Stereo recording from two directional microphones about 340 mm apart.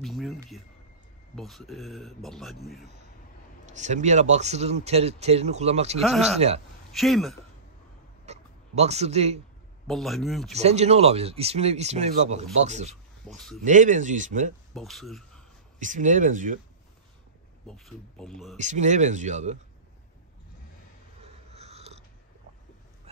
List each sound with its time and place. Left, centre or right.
0.0 s a sound: centre
1.3 s a man's voice: centre
3.7 s speech: right
5.9 s a man's voice: centre
6.3 s a man's voice: centre
6.9 s a man's voice: centre
8.3 s speech: centre
9.8 s a man's voice: centre
10.5 s speech: centre
14.7 s speech: centre
15.8 s speech: right
17.6 s a man's voice: centre
18.6 s speech: right
21.2 s a sound: centre